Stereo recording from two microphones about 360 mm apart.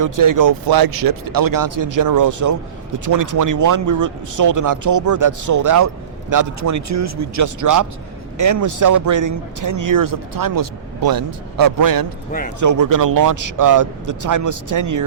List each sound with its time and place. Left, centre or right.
0.0 s a man's voice: right